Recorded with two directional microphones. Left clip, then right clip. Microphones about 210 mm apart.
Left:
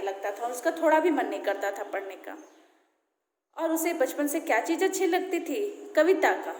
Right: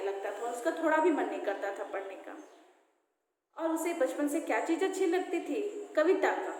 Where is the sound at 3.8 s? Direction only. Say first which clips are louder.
Left 4 dB; 50° left (ahead or behind).